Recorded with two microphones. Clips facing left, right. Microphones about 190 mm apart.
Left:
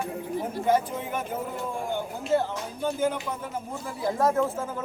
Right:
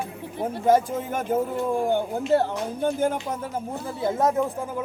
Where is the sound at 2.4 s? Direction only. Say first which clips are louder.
Right 5 dB; 50° right (ahead or behind).